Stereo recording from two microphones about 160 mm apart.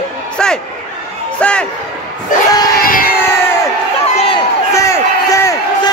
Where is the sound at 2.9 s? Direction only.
60° left (ahead or behind).